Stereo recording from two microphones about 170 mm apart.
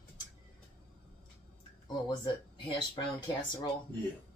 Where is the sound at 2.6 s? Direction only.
25° left (ahead or behind).